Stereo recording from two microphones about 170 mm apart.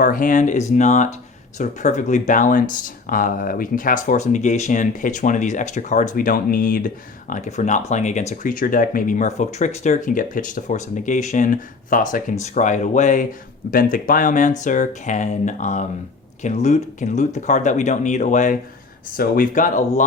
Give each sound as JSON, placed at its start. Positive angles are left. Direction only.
{"t": 0.0, "sound": "speech", "side_deg": 50}